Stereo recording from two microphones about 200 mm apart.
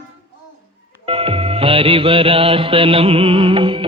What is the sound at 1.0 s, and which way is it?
Music, 25° right (ahead or behind).